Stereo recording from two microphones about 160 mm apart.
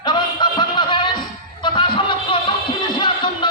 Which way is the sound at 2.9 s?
30° left (ahead or behind).